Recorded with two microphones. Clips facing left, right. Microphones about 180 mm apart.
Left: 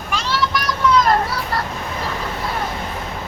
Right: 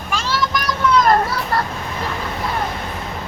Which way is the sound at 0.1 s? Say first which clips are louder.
Even; 45° right (ahead or behind).